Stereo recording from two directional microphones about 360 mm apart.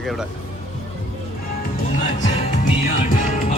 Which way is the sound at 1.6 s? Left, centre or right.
Centre.